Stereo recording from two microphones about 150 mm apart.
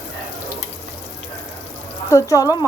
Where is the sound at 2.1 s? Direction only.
20° left (ahead or behind).